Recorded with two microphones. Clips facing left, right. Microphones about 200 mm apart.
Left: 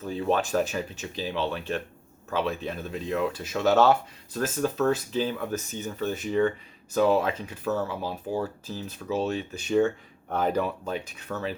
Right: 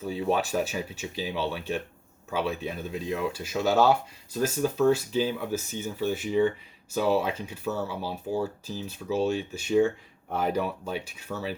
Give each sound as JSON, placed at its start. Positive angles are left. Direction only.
{"t": 0.0, "sound": "speech", "side_deg": -10}